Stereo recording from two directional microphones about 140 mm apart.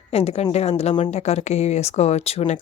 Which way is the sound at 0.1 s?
45° left (ahead or behind).